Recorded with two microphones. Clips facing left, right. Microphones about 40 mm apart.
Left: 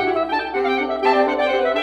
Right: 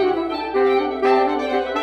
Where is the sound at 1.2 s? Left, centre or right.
Left.